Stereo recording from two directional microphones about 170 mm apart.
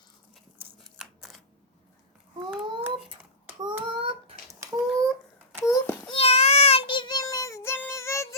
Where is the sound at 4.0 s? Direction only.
30° right (ahead or behind).